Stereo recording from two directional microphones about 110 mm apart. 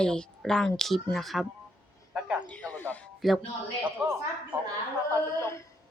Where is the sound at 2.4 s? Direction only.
15° left (ahead or behind).